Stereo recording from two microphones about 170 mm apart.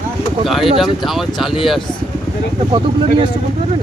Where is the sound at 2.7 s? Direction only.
30° right (ahead or behind).